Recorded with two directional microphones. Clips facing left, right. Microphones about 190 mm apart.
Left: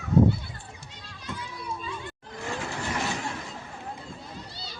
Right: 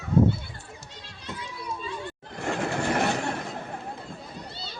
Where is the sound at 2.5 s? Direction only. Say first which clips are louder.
Right 6 dB; 60° right (ahead or behind).